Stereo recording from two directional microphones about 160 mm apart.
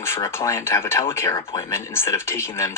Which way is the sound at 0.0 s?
15° left (ahead or behind).